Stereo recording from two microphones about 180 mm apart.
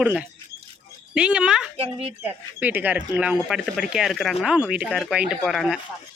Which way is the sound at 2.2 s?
10° right (ahead or behind).